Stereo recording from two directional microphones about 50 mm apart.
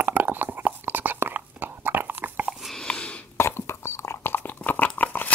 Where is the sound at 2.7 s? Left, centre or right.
Left.